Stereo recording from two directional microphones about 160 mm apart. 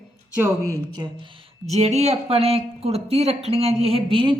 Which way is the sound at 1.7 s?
45° right (ahead or behind).